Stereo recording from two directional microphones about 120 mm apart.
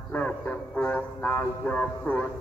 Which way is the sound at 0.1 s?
15° left (ahead or behind).